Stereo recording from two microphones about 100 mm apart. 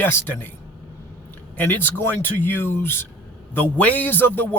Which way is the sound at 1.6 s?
20° left (ahead or behind).